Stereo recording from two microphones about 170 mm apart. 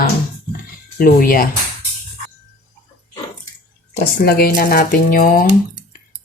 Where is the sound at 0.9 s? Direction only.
55° left (ahead or behind).